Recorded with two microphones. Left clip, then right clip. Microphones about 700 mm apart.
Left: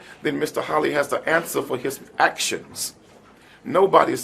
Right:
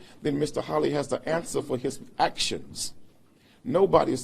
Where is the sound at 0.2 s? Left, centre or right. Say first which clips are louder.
Left 4 dB; right.